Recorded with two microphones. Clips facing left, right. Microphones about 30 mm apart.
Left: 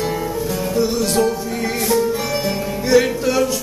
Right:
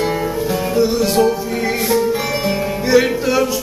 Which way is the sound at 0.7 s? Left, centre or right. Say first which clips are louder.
Right 3 dB; centre.